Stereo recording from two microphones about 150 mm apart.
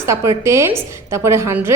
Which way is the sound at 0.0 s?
20° right (ahead or behind).